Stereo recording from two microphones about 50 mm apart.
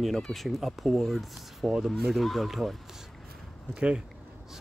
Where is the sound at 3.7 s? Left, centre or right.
Centre.